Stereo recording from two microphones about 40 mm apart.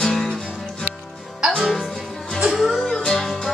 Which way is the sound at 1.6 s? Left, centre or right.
Centre.